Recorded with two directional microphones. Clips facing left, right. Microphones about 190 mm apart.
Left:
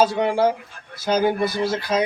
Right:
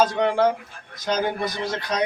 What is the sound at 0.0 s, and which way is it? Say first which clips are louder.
Speech: left 1 dB; 10° left (ahead or behind).